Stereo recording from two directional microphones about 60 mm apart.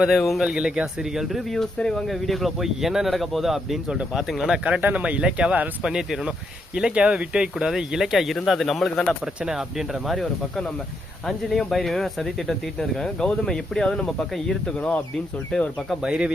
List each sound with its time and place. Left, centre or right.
0.0 s speech: centre
0.4 s speech: centre
1.5 s speech: centre
3.8 s speech: centre
4.8 s speech: right; by 10.2 s centre
11.3 s speech: centre
14.8 s speech: left
16.0 s speech: centre